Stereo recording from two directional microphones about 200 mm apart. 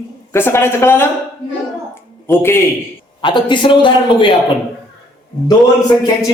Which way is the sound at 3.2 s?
25° left (ahead or behind).